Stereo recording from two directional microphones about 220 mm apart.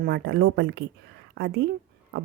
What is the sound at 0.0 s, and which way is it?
A woman's voice, 45° right (ahead or behind).